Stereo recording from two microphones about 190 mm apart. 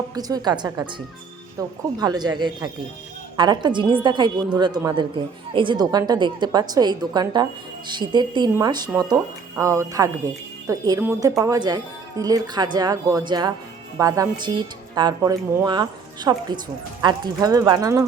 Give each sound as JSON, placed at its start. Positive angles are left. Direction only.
{"t": 0.1, "sound": "a woman's voice", "side_deg": -20}